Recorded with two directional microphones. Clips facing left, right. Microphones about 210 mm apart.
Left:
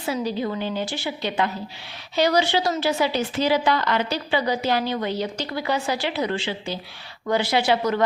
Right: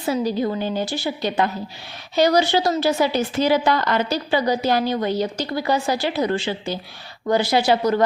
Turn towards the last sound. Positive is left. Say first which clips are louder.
# right 3 dB
turn(degrees=-40)  # may be behind; listen again after turning